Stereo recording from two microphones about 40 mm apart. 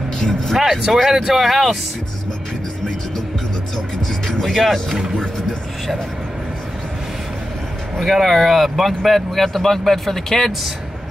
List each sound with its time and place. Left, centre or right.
0.6 s speech: centre
4.3 s music: centre
5.1 s vehicle: left
8.0 s speech: centre